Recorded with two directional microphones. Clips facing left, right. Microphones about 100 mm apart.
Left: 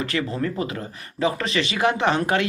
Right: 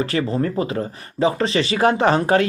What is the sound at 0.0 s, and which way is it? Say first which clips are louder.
Speech: right 4 dB; 35° right (ahead or behind).